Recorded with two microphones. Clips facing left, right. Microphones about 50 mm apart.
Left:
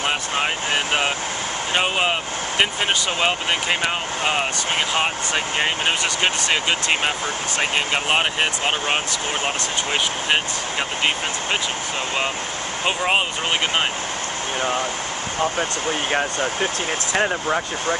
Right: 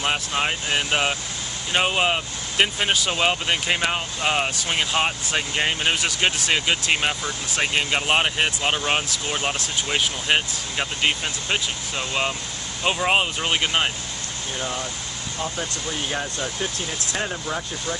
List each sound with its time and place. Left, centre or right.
0.0 s vehicle: centre
0.7 s speech: centre
12.8 s speech: centre
14.6 s speech: left